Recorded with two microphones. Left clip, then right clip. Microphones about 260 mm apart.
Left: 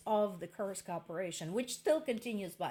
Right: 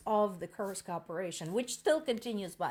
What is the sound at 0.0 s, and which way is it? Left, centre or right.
Speech, right.